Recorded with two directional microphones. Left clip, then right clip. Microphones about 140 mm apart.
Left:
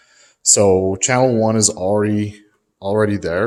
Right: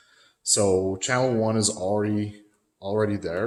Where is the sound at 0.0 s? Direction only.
40° left (ahead or behind).